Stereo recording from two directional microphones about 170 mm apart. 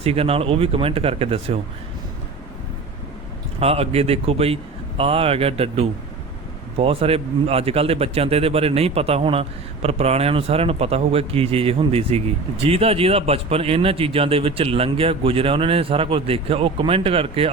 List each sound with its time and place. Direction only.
0.0 s a man's voice: 35° right (ahead or behind)
3.6 s a man's voice: 35° right (ahead or behind)